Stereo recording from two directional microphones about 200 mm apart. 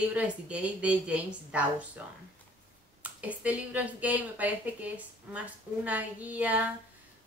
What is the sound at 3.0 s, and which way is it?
Speech, 5° right (ahead or behind).